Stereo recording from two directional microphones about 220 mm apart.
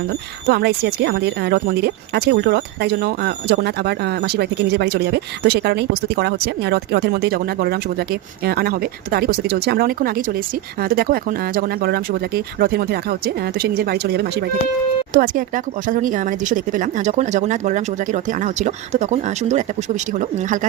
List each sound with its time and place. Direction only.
0.4 s speech: 45° right (ahead or behind)
15.1 s speech: 40° right (ahead or behind)